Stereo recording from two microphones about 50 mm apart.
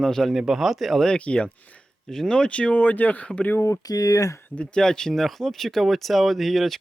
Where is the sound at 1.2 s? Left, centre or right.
Left.